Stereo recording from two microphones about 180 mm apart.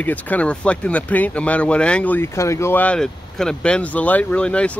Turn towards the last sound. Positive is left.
turn(degrees=5)  # may be behind; listen again after turning